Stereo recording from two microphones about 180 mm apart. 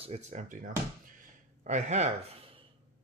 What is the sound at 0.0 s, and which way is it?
Speech, 35° right (ahead or behind).